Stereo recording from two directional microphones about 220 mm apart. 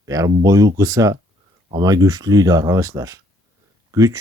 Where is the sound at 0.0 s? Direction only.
15° right (ahead or behind).